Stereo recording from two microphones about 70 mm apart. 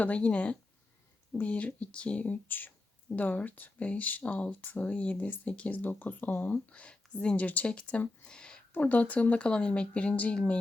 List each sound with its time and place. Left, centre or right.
0.0 s speech: centre